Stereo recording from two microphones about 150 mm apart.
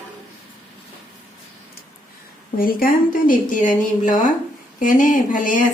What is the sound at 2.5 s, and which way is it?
Speech, 70° left (ahead or behind).